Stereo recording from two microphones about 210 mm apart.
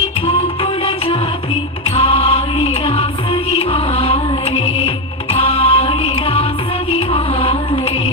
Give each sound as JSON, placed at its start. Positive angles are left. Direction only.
{"t": 0.3, "sound": "music", "side_deg": 25}